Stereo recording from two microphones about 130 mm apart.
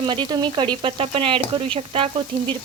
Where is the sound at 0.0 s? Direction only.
40° right (ahead or behind).